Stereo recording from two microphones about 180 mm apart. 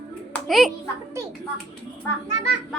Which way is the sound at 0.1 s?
Centre (ahead or behind).